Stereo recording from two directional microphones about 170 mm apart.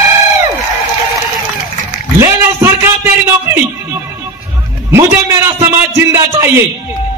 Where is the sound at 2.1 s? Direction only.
15° right (ahead or behind).